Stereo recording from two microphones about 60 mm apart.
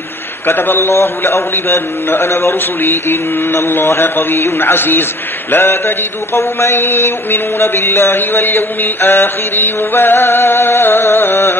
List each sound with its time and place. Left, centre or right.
0.5 s a man's voice: left
2.8 s mantra: left